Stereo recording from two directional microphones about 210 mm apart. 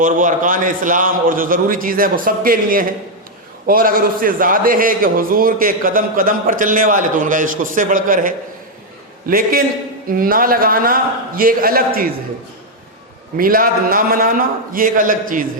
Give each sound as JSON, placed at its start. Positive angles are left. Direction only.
{"t": 0.0, "sound": "a man's voice", "side_deg": -40}
{"t": 13.3, "sound": "a man's voice", "side_deg": -40}